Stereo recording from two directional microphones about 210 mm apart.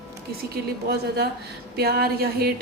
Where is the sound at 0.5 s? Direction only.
50° right (ahead or behind).